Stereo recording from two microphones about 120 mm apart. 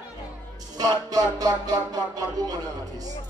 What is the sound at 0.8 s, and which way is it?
Music, 35° right (ahead or behind).